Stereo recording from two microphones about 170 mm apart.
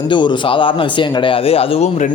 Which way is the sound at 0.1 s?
25° left (ahead or behind).